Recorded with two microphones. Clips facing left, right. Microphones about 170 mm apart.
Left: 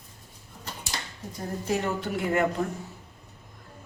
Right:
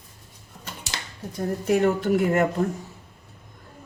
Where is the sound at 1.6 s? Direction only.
50° right (ahead or behind).